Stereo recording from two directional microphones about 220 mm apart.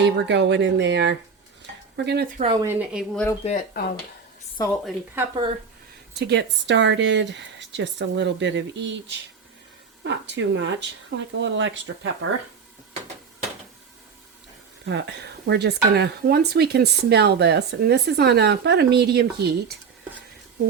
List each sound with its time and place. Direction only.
0.0 s speech: 50° right (ahead or behind)
2.4 s speech: 20° right (ahead or behind)
2.6 s a woman's voice: 5° right (ahead or behind)
3.4 s speech: 30° left (ahead or behind)
4.6 s a woman's voice: 15° left (ahead or behind)
6.1 s speech: 50° right (ahead or behind)
14.8 s speech: 55° right (ahead or behind)